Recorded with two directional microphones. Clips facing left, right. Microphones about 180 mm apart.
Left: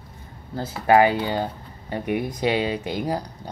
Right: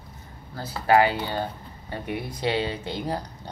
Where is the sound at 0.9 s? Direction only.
15° left (ahead or behind).